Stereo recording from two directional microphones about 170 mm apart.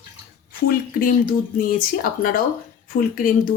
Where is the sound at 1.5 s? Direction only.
55° left (ahead or behind).